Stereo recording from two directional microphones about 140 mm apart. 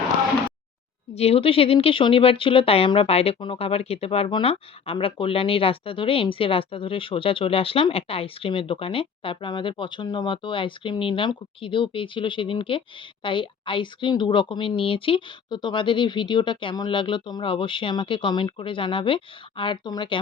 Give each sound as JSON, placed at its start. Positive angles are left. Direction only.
{"t": 1.1, "sound": "speech", "side_deg": 45}